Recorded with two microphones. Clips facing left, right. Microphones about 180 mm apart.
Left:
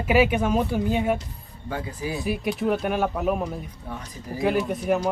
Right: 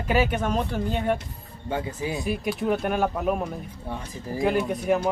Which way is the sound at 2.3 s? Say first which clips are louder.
Left 2 dB; centre (ahead or behind).